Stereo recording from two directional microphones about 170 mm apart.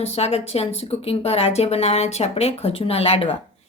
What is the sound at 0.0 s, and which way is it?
Speech, 35° left (ahead or behind).